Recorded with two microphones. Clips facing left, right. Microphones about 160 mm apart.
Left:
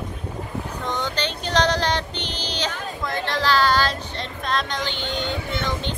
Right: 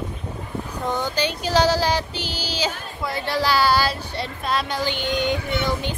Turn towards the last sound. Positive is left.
turn(degrees=-10)  # may be behind; listen again after turning